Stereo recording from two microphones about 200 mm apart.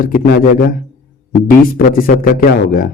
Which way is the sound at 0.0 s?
45° left (ahead or behind).